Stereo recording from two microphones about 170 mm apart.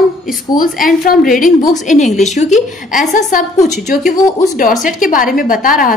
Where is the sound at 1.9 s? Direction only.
45° left (ahead or behind).